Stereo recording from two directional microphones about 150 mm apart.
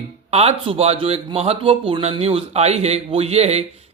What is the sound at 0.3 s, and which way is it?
Speech, 45° right (ahead or behind).